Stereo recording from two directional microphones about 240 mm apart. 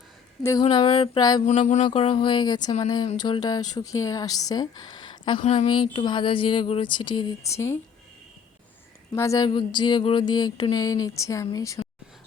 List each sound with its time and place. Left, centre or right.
0.4 s a woman's voice: centre
1.5 s a woman's voice: left; by 7.8 s centre
9.1 s a woman's voice: centre